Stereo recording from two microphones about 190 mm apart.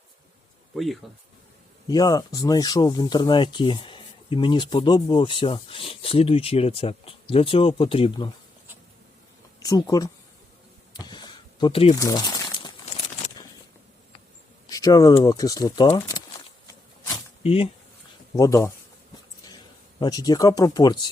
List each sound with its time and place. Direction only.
1.0 s speech: centre (ahead or behind)
1.9 s speech: 20° left (ahead or behind)
9.6 s speech: 20° left (ahead or behind)
10.9 s a sound: 25° left (ahead or behind)
11.9 s crumpling: 20° left (ahead or behind); by 13.3 s 35° left (ahead or behind)
14.7 s speech: 20° left (ahead or behind)
17.4 s speech: 30° left (ahead or behind)
18.3 s speech: 15° left (ahead or behind)
20.0 s speech: 20° left (ahead or behind)